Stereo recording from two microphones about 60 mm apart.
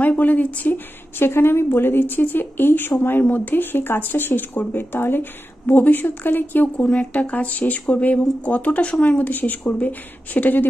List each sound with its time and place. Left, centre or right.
0.0 s speech: left
1.2 s speech: left